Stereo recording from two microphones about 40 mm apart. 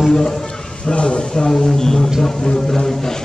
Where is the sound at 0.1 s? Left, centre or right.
Centre.